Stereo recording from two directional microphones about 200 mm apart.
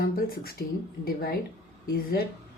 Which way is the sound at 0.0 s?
50° left (ahead or behind).